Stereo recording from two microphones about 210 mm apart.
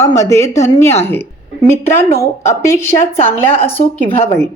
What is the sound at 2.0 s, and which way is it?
Speech, 35° left (ahead or behind).